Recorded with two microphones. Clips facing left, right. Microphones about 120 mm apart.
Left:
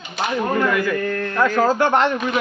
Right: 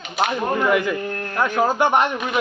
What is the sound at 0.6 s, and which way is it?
A man's voice, 20° right (ahead or behind).